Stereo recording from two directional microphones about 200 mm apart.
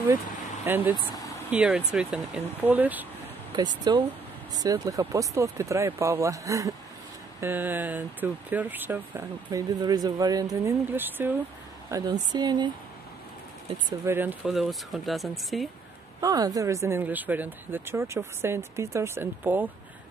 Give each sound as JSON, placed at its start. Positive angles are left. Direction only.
{"t": 0.7, "sound": "speech", "side_deg": -10}
{"t": 0.9, "sound": "speech", "side_deg": 20}
{"t": 1.5, "sound": "speech", "side_deg": -5}
{"t": 3.5, "sound": "speech", "side_deg": -20}
{"t": 11.9, "sound": "speech", "side_deg": -20}
{"t": 13.8, "sound": "speech", "side_deg": -10}
{"t": 16.2, "sound": "speech", "side_deg": -20}